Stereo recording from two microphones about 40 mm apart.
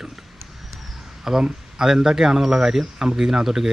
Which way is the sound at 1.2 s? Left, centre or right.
Centre.